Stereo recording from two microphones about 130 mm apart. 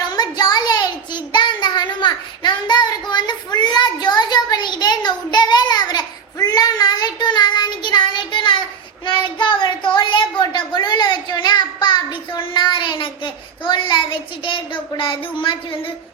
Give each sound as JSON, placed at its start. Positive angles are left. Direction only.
{"t": 0.1, "sound": "child singing", "side_deg": 30}
{"t": 9.0, "sound": "a child's voice", "side_deg": 40}